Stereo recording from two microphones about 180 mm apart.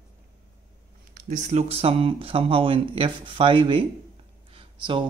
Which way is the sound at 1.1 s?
45° right (ahead or behind).